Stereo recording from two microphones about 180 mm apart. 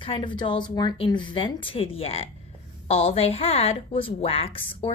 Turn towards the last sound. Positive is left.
turn(degrees=35)  # may be behind; listen again after turning